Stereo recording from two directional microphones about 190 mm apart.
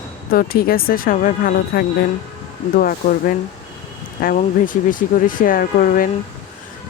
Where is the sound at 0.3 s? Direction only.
50° left (ahead or behind).